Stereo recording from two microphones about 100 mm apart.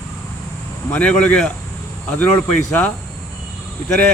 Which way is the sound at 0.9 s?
15° left (ahead or behind).